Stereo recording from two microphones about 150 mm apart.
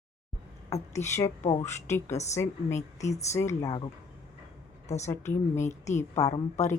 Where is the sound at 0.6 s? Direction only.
20° left (ahead or behind).